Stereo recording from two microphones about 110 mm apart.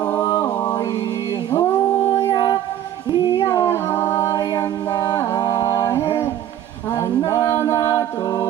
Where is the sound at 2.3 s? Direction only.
35° left (ahead or behind).